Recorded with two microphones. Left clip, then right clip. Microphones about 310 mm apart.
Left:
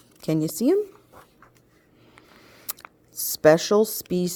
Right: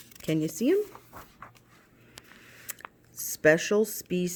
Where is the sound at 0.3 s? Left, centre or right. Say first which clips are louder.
Left 4 dB; centre.